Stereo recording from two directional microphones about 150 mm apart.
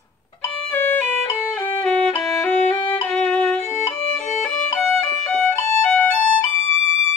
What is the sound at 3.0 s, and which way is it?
Violin, 5° left (ahead or behind).